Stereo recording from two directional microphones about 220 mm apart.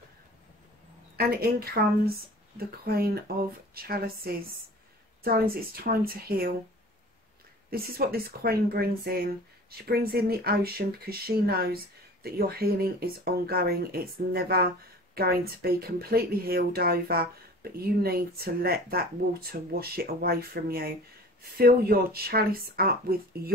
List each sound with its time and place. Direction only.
1.1 s speech: 45° right (ahead or behind)
7.7 s speech: 45° right (ahead or behind)